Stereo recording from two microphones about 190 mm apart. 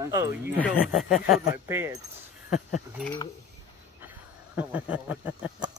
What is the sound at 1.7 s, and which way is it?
Speech, 15° right (ahead or behind).